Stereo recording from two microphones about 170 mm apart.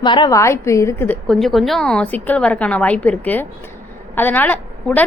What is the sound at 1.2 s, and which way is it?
A woman's voice, centre (ahead or behind).